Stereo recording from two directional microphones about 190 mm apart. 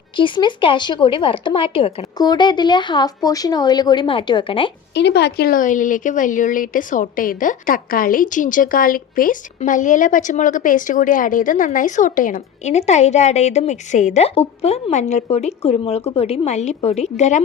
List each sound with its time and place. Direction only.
0.2 s speech: 25° left (ahead or behind)
4.9 s a woman's voice: 60° left (ahead or behind); by 17.4 s 35° left (ahead or behind)